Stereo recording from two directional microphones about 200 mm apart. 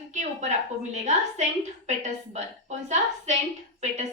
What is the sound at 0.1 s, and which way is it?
Speech, 35° right (ahead or behind).